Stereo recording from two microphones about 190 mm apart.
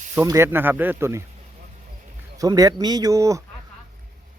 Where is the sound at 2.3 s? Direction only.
20° right (ahead or behind).